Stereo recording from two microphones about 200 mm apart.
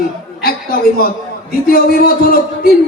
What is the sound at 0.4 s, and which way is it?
A man's voice, 50° left (ahead or behind).